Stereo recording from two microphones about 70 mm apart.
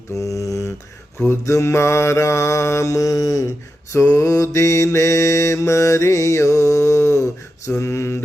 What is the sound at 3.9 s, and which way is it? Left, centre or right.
Mantra, left.